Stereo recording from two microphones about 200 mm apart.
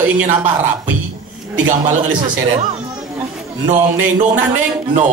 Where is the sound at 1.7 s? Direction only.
40° right (ahead or behind).